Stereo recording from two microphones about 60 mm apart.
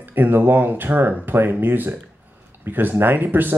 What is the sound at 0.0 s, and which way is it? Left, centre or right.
Speech, right.